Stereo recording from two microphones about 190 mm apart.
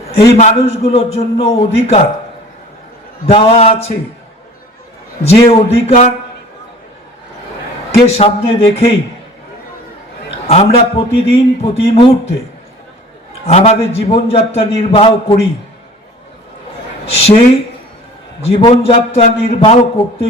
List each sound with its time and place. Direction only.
0.2 s a man's voice: 30° left (ahead or behind)
3.2 s a man's voice: 30° left (ahead or behind)
5.2 s a man's voice: 30° left (ahead or behind)
8.1 s a man's voice: 30° left (ahead or behind)
10.4 s a man's voice: 30° left (ahead or behind)
13.5 s a man's voice: 35° left (ahead or behind)
17.2 s a man's voice: 30° left (ahead or behind)